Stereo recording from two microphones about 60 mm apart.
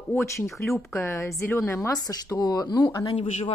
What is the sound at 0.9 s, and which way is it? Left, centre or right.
Speech, left.